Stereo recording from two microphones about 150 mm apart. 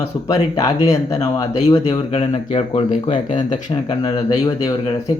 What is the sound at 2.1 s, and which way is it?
Speech, 40° left (ahead or behind).